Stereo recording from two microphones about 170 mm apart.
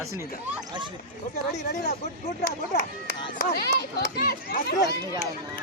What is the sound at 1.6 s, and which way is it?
Speech, 65° left (ahead or behind).